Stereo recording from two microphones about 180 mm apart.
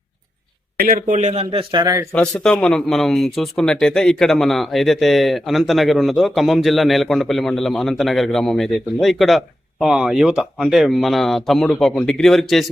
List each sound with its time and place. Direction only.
0.8 s speech: 50° right (ahead or behind)
1.3 s a man's voice: 30° right (ahead or behind)
2.1 s speech: 5° left (ahead or behind)